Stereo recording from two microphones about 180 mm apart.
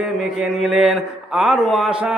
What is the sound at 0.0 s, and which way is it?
A man's voice, 5° right (ahead or behind).